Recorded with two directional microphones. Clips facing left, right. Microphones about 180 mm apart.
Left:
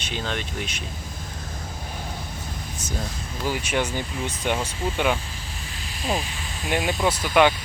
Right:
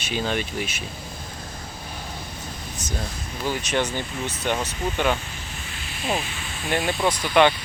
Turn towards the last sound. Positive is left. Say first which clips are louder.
# even
turn(degrees=5)  # may be behind; listen again after turning